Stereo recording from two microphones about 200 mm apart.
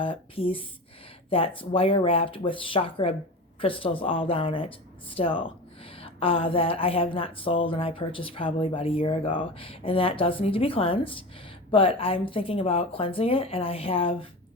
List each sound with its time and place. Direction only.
0.0 s speech: 25° left (ahead or behind)